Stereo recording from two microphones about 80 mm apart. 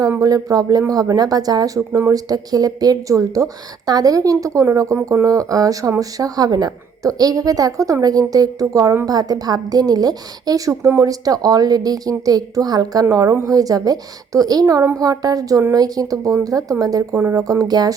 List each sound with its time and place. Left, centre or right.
0.2 s a woman's voice: right
10.7 s speech: right